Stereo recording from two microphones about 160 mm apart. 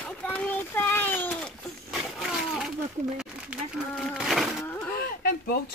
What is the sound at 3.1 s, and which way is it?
Speech, 5° right (ahead or behind).